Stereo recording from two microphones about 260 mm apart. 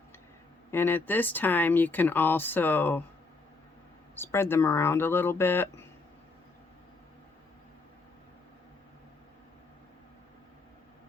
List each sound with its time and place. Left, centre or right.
0.7 s speech: centre
4.1 s speech: centre